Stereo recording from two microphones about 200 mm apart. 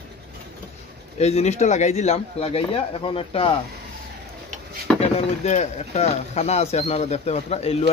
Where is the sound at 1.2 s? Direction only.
35° left (ahead or behind).